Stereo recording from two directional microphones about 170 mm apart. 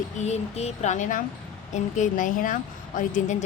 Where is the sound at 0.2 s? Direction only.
40° left (ahead or behind).